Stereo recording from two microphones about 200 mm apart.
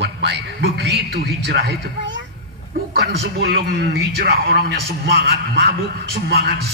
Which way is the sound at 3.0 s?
55° right (ahead or behind).